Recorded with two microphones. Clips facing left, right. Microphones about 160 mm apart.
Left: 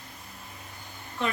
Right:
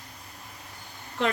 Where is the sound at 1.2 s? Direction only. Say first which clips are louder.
Right 4 dB; 85° right.